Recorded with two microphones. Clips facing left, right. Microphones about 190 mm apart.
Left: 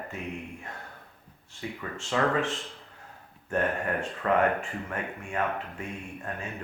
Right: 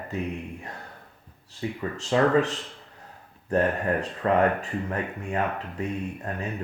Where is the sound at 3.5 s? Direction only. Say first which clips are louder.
Right 4 dB; 35° right (ahead or behind).